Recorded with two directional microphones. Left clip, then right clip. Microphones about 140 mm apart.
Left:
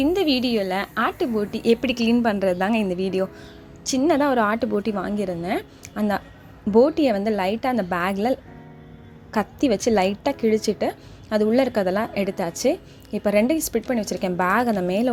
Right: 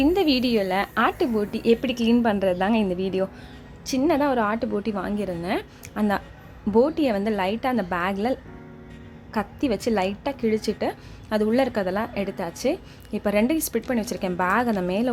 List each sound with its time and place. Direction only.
0.0 s a woman's voice: centre (ahead or behind)
2.0 s a woman's voice: centre (ahead or behind); by 15.1 s 20° left (ahead or behind)